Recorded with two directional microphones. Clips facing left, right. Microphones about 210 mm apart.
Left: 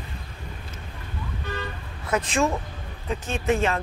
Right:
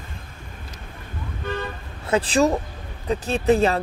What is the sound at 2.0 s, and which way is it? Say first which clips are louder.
Speech: right 5 dB; 30° right (ahead or behind).